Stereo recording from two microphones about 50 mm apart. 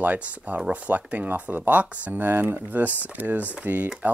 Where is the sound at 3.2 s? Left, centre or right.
Right.